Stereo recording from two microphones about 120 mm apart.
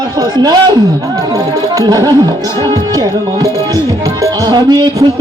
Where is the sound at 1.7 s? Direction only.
30° right (ahead or behind).